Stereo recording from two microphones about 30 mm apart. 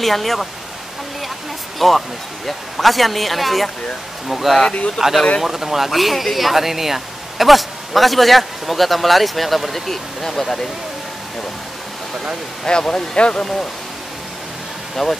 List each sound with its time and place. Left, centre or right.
0.0 s speech: centre
1.8 s speech: centre
12.6 s speech: left
15.0 s speech: centre